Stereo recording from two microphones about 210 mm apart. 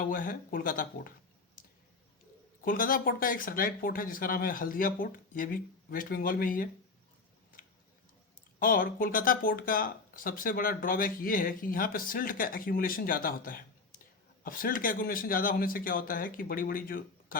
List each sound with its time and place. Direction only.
0.0 s speech: 40° left (ahead or behind)
2.6 s speech: 40° left (ahead or behind)
8.5 s speech: 40° left (ahead or behind)